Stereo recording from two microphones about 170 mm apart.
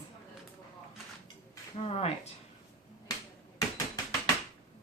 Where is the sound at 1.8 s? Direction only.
35° left (ahead or behind).